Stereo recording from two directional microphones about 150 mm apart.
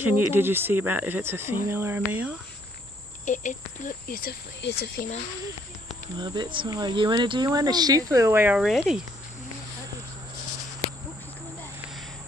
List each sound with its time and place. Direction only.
0.0 s speech: 15° right (ahead or behind)
3.3 s speech: 60° left (ahead or behind); by 5.0 s 85° left
6.1 s speech: 30° right (ahead or behind); by 8.6 s 10° right (ahead or behind)
8.6 s speech: centre (ahead or behind)
10.8 s a sound: 40° left (ahead or behind)